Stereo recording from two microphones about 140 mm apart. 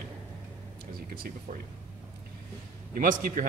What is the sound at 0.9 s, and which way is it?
Speech, 90° right.